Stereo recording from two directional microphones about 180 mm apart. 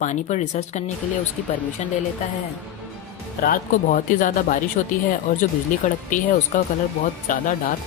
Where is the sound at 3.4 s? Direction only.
50° left (ahead or behind).